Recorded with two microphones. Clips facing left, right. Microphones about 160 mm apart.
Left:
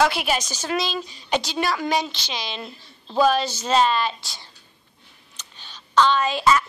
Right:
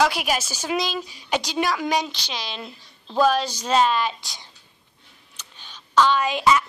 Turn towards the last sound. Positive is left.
turn(degrees=-15)  # may be behind; listen again after turning